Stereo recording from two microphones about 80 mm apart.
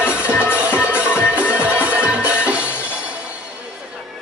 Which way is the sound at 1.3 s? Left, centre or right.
Centre.